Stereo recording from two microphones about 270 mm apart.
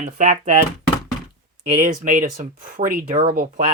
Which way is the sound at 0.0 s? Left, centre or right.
Right.